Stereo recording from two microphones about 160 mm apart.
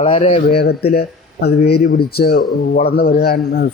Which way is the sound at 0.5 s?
80° left.